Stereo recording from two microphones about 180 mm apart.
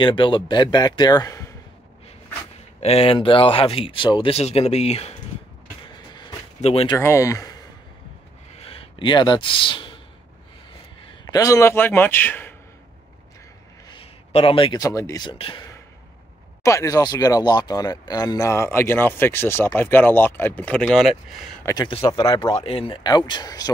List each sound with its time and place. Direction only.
0.0 s a man's voice: 25° left (ahead or behind)
2.8 s speech: 35° left (ahead or behind)
5.9 s a sound: 25° left (ahead or behind)
6.6 s speech: 35° left (ahead or behind)
7.0 s speech: 15° left (ahead or behind)
8.5 s a sound: 30° left (ahead or behind)
11.1 s a man's voice: 20° left (ahead or behind)
13.8 s speech: 30° left (ahead or behind)
15.3 s speech: 30° left (ahead or behind)
16.6 s speech: 20° left (ahead or behind); by 21.5 s centre (ahead or behind)
21.6 s a man's voice: 25° left (ahead or behind)